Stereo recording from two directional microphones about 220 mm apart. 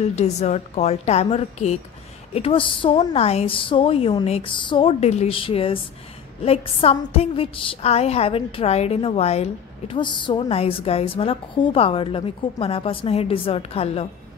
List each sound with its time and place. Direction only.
0.1 s a woman's voice: 30° left (ahead or behind)